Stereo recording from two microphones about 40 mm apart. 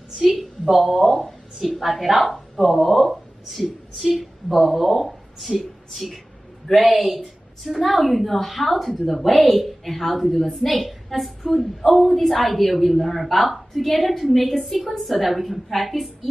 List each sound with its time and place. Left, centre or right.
0.1 s a woman's voice: centre